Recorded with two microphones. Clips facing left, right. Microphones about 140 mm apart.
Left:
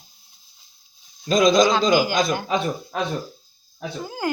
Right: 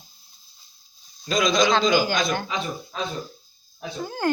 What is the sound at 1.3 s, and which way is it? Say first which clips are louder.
A man's voice: left 4 dB; 45° left (ahead or behind).